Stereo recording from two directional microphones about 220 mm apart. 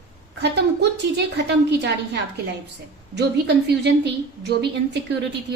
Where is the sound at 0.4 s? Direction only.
50° right (ahead or behind).